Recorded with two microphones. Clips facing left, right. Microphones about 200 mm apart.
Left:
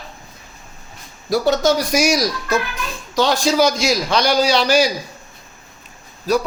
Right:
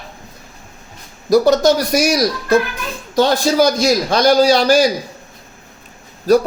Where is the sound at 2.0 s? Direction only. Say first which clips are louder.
Right 2 dB; 60° right (ahead or behind).